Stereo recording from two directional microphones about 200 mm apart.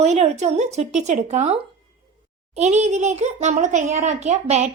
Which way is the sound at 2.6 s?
35° right (ahead or behind).